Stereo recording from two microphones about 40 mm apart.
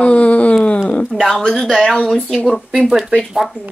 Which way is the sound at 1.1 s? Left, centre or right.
Centre.